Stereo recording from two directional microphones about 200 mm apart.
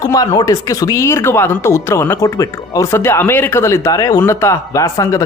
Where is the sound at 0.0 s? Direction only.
15° left (ahead or behind).